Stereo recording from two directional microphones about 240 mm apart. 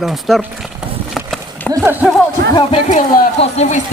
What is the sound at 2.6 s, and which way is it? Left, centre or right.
Speech, left.